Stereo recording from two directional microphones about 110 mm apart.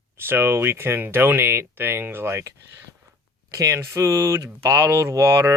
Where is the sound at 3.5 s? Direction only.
30° right (ahead or behind).